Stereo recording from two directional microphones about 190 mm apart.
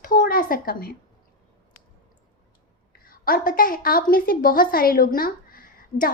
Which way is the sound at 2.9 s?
50° left (ahead or behind).